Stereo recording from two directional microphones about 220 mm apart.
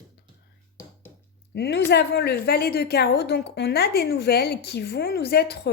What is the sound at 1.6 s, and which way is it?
A woman's voice, 50° left (ahead or behind).